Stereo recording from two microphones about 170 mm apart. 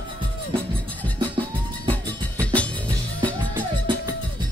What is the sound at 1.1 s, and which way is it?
Music, 10° left (ahead or behind).